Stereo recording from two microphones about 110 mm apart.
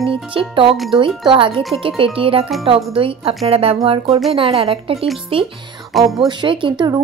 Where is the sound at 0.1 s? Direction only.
55° right (ahead or behind).